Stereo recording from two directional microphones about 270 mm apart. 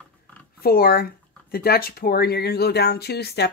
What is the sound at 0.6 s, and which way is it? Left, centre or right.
Speech, left.